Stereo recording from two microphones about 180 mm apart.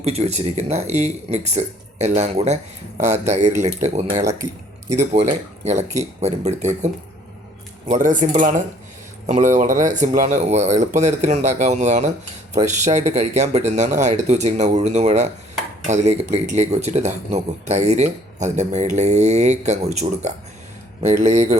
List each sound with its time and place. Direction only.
0.0 s speech: 35° right (ahead or behind)
5.6 s speech: 40° right (ahead or behind)